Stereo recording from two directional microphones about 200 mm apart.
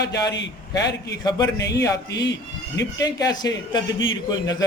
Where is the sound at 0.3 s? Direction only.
60° left (ahead or behind).